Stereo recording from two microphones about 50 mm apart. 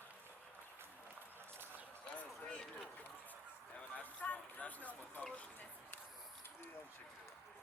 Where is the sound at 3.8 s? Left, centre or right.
Left.